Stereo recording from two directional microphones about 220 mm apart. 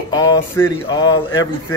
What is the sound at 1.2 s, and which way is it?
Speech, 70° left (ahead or behind).